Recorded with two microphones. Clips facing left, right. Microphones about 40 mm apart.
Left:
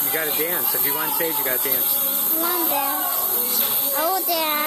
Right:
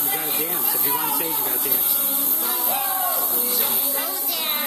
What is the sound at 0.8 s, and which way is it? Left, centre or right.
Speech, centre.